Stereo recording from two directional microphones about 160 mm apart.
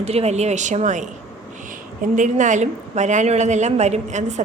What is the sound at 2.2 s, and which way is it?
A woman's voice, 50° right (ahead or behind).